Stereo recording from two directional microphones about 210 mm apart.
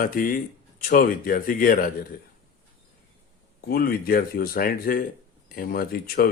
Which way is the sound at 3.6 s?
45° left (ahead or behind).